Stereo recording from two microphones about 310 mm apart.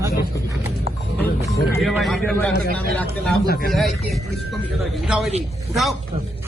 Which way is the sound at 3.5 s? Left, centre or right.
Left.